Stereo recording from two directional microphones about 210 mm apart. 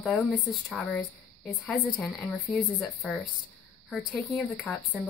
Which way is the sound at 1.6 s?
5° left (ahead or behind).